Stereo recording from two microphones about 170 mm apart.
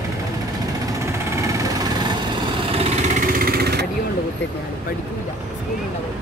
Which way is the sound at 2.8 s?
45° right (ahead or behind).